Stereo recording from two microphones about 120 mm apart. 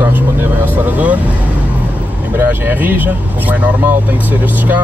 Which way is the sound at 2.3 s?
15° right (ahead or behind).